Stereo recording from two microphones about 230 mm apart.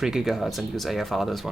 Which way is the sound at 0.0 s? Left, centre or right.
Centre.